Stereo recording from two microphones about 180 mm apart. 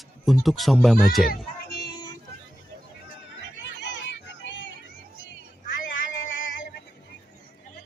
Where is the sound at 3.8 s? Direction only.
75° left (ahead or behind).